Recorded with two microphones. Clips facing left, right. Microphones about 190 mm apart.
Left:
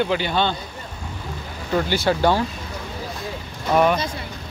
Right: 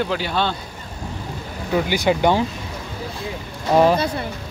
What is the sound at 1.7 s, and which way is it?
Speech, 15° right (ahead or behind).